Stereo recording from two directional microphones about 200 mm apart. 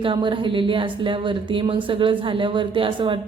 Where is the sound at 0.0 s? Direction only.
25° right (ahead or behind).